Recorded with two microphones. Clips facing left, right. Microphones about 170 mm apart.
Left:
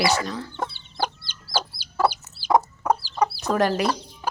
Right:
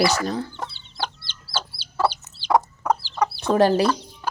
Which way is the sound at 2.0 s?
10° left (ahead or behind).